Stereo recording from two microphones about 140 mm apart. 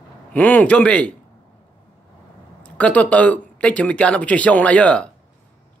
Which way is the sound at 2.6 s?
10° left (ahead or behind).